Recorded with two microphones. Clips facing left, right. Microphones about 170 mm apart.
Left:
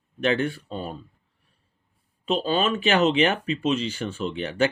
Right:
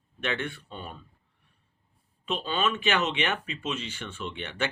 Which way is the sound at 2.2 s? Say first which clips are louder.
Left 6 dB; 35° left (ahead or behind).